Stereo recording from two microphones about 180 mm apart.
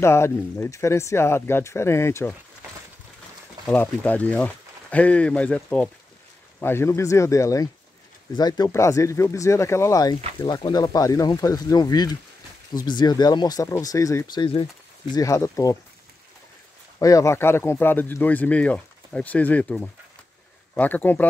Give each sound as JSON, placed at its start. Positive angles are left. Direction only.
{"t": 0.0, "sound": "speech", "side_deg": 15}
{"t": 3.6, "sound": "speech", "side_deg": 10}
{"t": 17.0, "sound": "speech", "side_deg": 15}